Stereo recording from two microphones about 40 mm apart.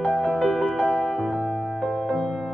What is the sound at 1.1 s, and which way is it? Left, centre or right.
Music, centre.